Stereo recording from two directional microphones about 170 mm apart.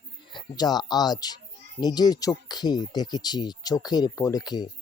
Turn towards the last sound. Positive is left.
turn(degrees=25)  # may be behind; listen again after turning